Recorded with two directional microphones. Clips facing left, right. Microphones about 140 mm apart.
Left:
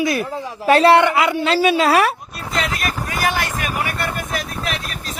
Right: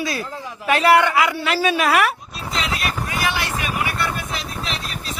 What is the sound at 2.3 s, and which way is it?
Vehicle, 50° left (ahead or behind).